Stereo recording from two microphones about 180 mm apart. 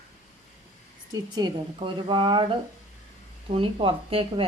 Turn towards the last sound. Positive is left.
turn(degrees=-30)  # may be behind; listen again after turning